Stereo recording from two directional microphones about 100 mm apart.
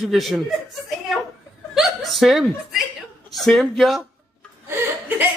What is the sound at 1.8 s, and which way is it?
Chuckle, centre (ahead or behind).